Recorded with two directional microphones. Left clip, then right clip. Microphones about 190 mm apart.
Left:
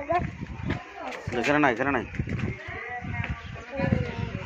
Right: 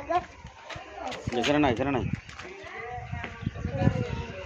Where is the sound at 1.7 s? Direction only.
15° right (ahead or behind).